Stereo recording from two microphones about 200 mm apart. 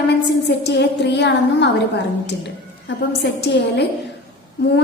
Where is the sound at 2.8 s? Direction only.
55° left (ahead or behind).